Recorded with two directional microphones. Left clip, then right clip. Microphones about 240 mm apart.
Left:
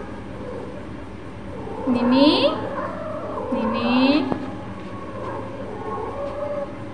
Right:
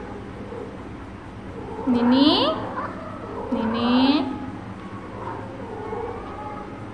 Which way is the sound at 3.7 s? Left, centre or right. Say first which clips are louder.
Left 1 dB; right.